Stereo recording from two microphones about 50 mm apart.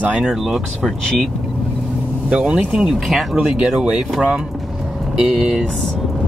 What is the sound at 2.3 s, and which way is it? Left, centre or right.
Speech, right.